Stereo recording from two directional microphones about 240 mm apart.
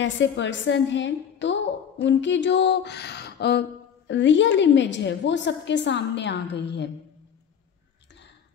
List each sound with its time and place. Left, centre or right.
0.0 s a woman's voice: left